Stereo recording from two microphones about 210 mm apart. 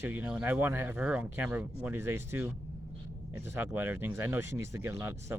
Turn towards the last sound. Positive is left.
turn(degrees=-10)  # may be behind; listen again after turning